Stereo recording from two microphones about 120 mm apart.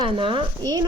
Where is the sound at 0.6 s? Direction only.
30° right (ahead or behind).